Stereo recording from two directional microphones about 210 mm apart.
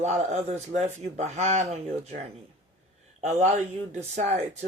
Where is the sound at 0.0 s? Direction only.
30° right (ahead or behind).